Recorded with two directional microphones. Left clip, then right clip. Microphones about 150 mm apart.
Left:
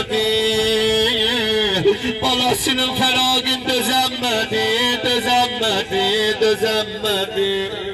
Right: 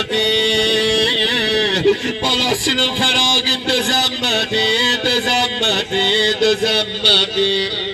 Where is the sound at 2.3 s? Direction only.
35° left (ahead or behind).